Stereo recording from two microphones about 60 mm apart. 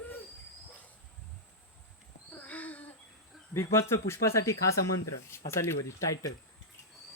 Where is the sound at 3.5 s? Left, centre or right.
Left.